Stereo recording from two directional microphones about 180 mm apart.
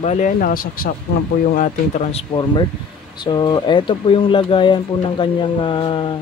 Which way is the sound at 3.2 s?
25° left (ahead or behind).